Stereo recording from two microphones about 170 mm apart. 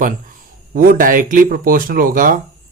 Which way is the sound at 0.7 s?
55° right (ahead or behind).